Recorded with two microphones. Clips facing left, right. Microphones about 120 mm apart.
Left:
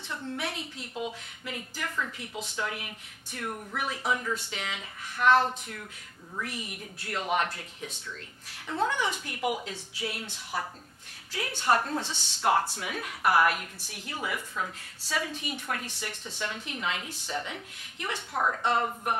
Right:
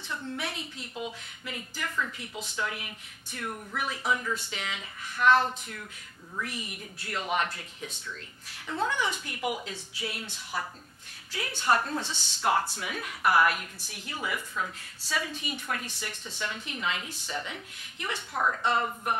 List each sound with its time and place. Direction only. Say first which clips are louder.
0.4 s a woman's voice: left 1 dB; 50° left (ahead or behind)
4.5 s a woman's voice: even; 50° left (ahead or behind)
10.5 s a woman's voice: left 1 dB; 40° left (ahead or behind)
12.4 s a woman's voice: left 1 dB; 50° left (ahead or behind)
15.1 s a woman's voice: left 1 dB; 50° left (ahead or behind)
15.9 s a woman's voice: left 1 dB; 55° left (ahead or behind)
18.3 s a woman's voice: even; 35° left (ahead or behind)